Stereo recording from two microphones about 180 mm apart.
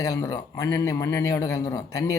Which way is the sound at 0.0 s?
20° left (ahead or behind).